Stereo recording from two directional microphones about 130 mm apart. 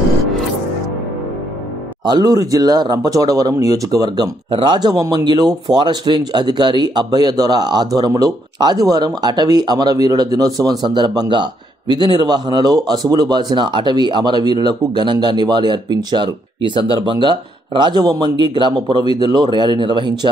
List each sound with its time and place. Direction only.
2.0 s speech: 30° right (ahead or behind)